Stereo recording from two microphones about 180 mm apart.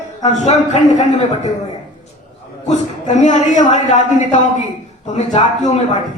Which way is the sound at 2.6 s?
40° left (ahead or behind).